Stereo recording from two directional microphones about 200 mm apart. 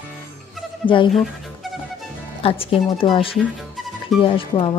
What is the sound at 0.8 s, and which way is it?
Speech, 25° left (ahead or behind).